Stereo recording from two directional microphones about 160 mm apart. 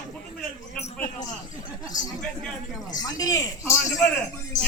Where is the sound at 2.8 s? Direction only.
25° left (ahead or behind).